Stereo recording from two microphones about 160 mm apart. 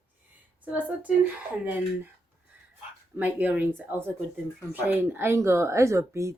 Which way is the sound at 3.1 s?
10° right (ahead or behind).